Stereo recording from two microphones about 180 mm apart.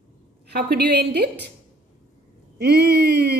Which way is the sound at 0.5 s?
65° right (ahead or behind).